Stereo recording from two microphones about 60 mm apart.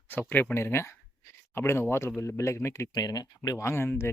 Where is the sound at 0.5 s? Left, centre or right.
Left.